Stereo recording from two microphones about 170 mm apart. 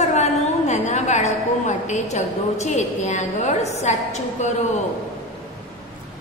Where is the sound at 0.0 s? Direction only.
40° left (ahead or behind).